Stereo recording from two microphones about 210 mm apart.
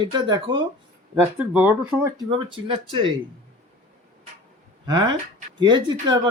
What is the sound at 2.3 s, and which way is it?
Speech, 25° right (ahead or behind).